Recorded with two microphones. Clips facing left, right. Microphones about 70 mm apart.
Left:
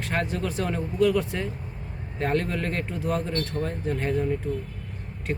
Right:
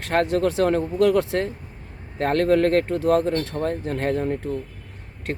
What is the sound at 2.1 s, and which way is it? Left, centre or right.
A man's voice, right.